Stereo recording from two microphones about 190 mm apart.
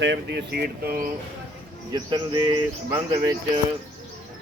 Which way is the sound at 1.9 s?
20° right (ahead or behind).